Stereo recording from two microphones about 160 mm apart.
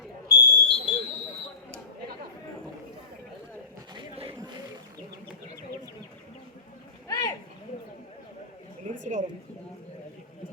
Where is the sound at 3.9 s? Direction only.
35° right (ahead or behind).